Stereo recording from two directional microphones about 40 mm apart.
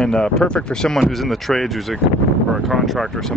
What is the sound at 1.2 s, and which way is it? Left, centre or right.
Speech, centre.